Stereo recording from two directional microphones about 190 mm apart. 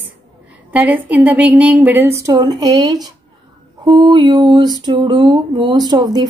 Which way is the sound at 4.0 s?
25° right (ahead or behind).